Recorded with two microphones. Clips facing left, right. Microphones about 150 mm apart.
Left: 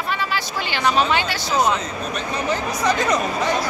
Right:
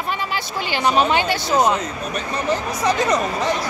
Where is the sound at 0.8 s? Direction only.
15° right (ahead or behind).